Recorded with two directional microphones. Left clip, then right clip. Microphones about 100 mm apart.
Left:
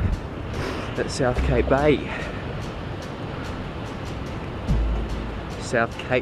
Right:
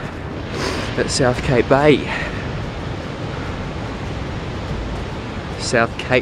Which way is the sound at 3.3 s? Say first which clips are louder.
Right 5 dB; 20° right (ahead or behind).